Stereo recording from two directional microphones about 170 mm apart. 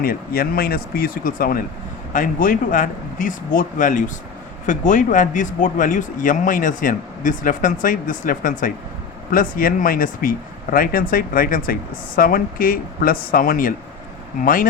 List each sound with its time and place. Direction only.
0.0 s speech: 60° left (ahead or behind)